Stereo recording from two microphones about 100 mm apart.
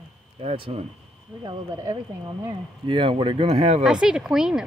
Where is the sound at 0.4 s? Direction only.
80° right.